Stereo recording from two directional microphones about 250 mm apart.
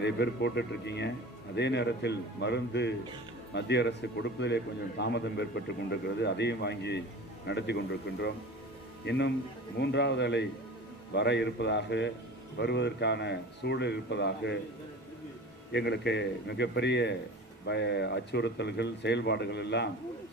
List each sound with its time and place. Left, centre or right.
0.0 s a man's voice: left
9.8 s a man's voice: left
15.7 s a man's voice: left